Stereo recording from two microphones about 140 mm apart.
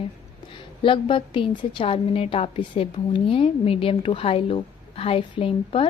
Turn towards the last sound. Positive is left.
turn(degrees=40)  # may be behind; listen again after turning